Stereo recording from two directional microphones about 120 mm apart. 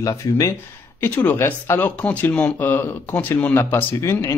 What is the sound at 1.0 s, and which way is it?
Speech, 15° left (ahead or behind).